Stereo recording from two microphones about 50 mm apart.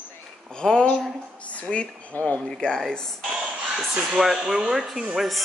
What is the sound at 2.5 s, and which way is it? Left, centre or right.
Speech, centre.